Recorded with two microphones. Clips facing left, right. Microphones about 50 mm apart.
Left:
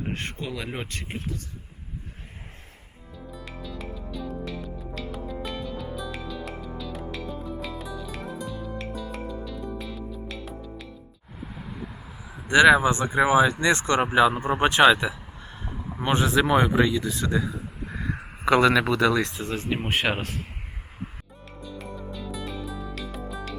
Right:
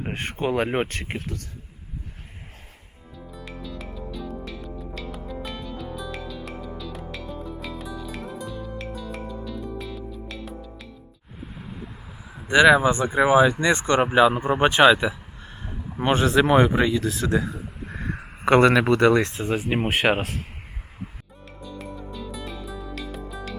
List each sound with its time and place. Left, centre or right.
0.0 s a sound: centre
0.3 s speech: right
3.3 s music: centre
12.5 s speech: centre
17.6 s a sound: centre
18.4 s speech: right
19.4 s speech: centre
21.6 s music: centre